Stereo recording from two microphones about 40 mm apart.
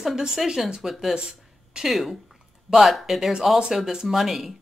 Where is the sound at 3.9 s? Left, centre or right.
Centre.